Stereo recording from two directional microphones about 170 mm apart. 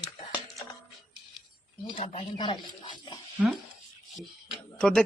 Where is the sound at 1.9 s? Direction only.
35° left (ahead or behind).